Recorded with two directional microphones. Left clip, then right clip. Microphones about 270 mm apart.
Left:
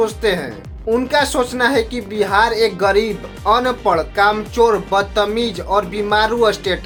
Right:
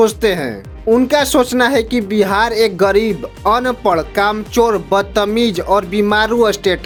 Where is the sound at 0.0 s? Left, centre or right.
Right.